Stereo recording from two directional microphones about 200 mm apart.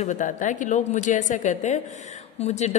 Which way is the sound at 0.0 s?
40° left (ahead or behind).